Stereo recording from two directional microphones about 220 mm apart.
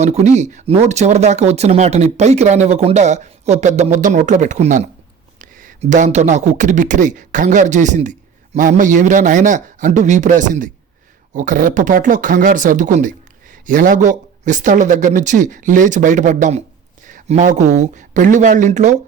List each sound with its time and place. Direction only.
0.0 s speech: 30° right (ahead or behind)